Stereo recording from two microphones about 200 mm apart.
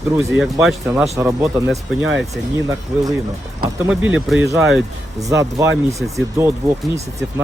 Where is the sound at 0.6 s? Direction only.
5° right (ahead or behind).